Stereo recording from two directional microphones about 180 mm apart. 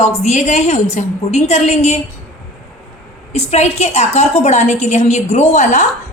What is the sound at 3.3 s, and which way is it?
A woman's voice, 35° left (ahead or behind).